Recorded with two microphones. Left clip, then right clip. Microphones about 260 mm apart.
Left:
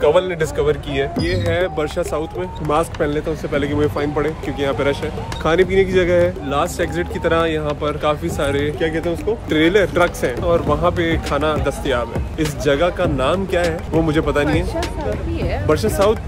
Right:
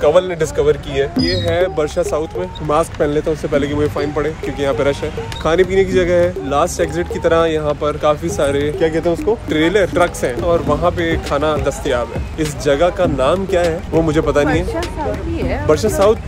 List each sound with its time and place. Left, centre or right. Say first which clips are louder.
0.0 s speech: right 2 dB; centre
9.5 s speech: left 1 dB; centre
15.3 s a sound: right 3 dB; right
15.7 s speech: right 3 dB; centre